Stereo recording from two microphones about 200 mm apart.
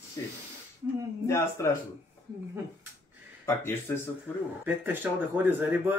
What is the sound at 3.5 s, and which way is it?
Speech, 10° left (ahead or behind).